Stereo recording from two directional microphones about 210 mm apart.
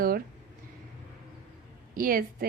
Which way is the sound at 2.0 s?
45° right (ahead or behind).